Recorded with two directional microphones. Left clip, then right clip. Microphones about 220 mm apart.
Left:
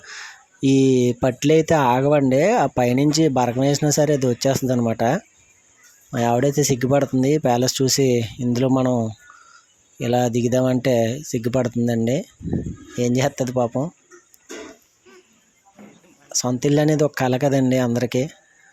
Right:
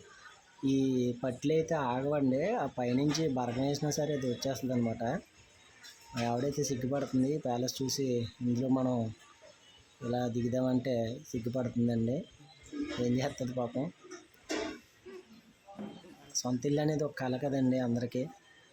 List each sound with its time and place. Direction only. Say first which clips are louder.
0.6 s speech: left 14 dB; 45° left (ahead or behind)
6.2 s speech: left 14 dB; 45° left (ahead or behind)
10.1 s speech: left 14 dB; 45° left (ahead or behind)
16.3 s speech: left 13 dB; 45° left (ahead or behind)